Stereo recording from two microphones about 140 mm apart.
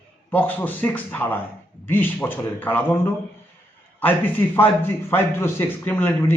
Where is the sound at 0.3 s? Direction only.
15° left (ahead or behind).